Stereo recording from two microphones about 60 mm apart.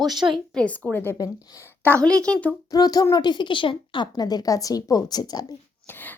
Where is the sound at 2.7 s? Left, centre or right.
Left.